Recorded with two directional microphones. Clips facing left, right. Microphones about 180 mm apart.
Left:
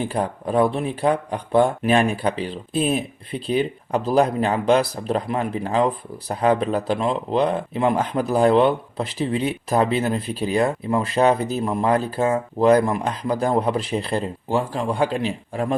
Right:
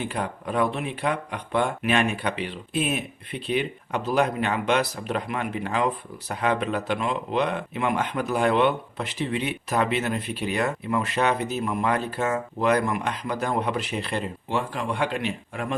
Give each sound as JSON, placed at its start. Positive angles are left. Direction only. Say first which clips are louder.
{"t": 0.0, "sound": "speech", "louder": "left 5 dB", "side_deg": 35}